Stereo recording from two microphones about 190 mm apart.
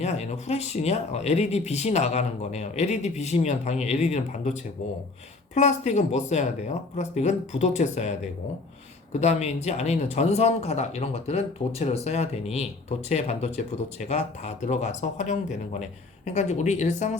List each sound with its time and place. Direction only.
0.0 s speech: 35° left (ahead or behind)
9.2 s speech: 35° left (ahead or behind)